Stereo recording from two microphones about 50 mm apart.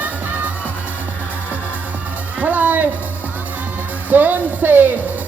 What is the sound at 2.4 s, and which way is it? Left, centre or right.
Music, right.